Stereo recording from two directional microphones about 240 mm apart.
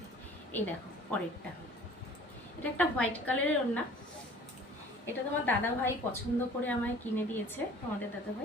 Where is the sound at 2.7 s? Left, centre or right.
Centre.